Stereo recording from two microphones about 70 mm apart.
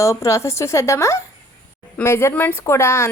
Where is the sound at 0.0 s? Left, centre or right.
Left.